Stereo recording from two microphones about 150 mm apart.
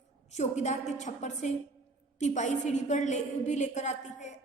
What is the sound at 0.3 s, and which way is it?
A woman's voice, 50° left (ahead or behind).